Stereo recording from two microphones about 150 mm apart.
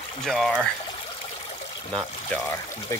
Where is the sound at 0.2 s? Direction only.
5° left (ahead or behind).